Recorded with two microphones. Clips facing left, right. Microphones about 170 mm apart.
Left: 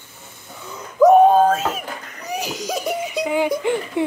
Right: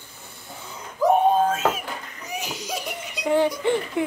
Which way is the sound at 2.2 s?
35° left (ahead or behind).